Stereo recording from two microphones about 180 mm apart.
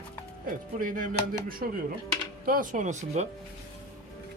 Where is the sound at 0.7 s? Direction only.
50° right (ahead or behind).